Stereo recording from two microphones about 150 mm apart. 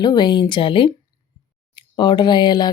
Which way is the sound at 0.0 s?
30° left (ahead or behind).